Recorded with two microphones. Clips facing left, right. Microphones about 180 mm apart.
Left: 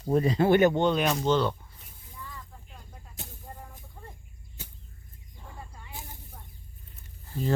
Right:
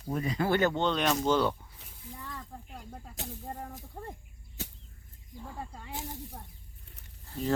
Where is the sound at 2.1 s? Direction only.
70° right (ahead or behind).